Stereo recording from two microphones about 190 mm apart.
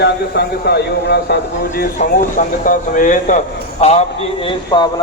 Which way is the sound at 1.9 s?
45° left (ahead or behind).